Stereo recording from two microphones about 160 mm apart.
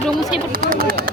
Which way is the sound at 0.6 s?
65° right (ahead or behind).